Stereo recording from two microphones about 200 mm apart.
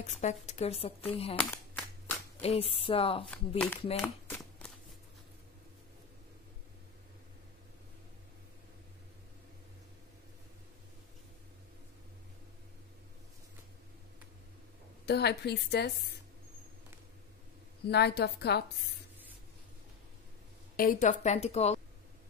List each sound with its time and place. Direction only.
0.0 s speech: 35° left (ahead or behind)
1.3 s speech: 10° left (ahead or behind)
2.4 s speech: 30° left (ahead or behind)
3.3 s speech: 5° left (ahead or behind)
4.0 s a sound: 5° left (ahead or behind)
15.0 s a woman's voice: 55° left (ahead or behind)
17.8 s a woman's voice: 55° left (ahead or behind)
20.7 s speech: 45° left (ahead or behind)